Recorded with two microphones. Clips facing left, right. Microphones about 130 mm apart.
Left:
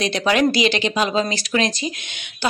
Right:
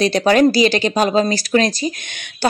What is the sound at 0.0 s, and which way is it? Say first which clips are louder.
A woman's voice: right 5 dB; 40° right (ahead or behind).